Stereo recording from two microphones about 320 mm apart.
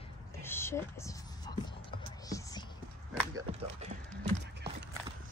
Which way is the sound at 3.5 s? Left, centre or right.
Right.